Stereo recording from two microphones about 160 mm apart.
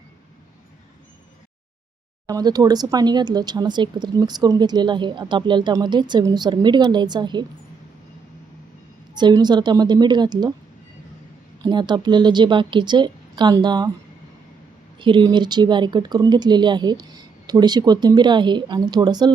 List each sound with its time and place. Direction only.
2.2 s speech: 25° right (ahead or behind)
9.1 s speech: 25° right (ahead or behind)
11.6 s speech: 25° right (ahead or behind)
14.9 s speech: 30° right (ahead or behind)